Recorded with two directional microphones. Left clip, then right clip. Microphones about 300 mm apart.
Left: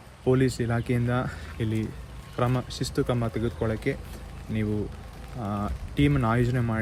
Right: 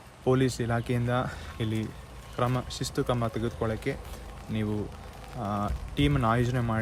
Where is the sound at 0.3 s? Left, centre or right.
Centre.